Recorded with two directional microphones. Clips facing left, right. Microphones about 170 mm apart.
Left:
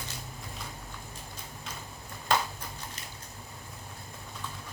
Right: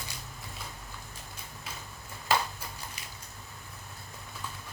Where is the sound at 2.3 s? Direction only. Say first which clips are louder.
Even; 5° right (ahead or behind).